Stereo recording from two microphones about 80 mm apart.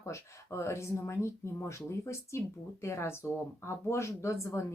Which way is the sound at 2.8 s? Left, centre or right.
Left.